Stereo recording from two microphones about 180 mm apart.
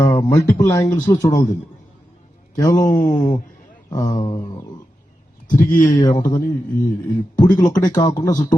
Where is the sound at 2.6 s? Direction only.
20° left (ahead or behind).